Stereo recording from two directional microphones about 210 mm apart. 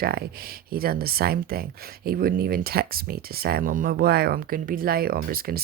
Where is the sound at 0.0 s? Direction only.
45° right (ahead or behind).